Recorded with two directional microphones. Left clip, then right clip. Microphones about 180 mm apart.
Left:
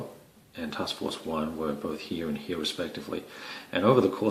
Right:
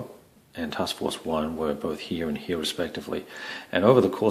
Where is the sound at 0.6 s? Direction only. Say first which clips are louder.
Right 4 dB; 45° right (ahead or behind).